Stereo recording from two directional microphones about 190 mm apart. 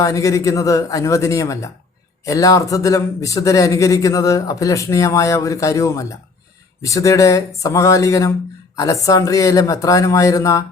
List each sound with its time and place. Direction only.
0.0 s speech: 15° left (ahead or behind)